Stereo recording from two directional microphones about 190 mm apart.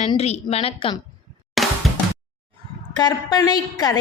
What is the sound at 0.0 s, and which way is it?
A woman's voice, 35° left (ahead or behind).